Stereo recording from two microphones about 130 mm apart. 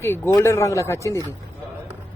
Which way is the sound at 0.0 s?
20° left (ahead or behind).